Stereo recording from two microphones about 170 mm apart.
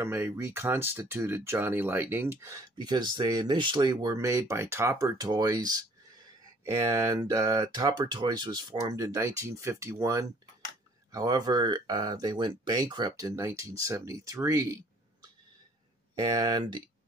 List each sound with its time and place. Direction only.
0.0 s speech: 15° right (ahead or behind)